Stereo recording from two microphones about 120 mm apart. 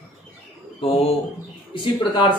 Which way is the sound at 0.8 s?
55° left (ahead or behind).